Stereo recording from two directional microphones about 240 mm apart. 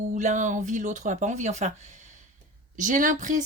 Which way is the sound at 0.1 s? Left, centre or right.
Right.